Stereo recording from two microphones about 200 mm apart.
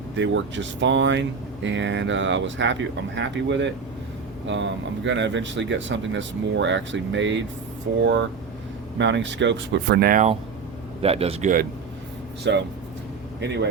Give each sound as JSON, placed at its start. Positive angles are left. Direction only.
{"t": 0.2, "sound": "speech", "side_deg": -65}
{"t": 9.0, "sound": "speech", "side_deg": -60}
{"t": 11.0, "sound": "speech", "side_deg": -30}
{"t": 12.4, "sound": "speech", "side_deg": -60}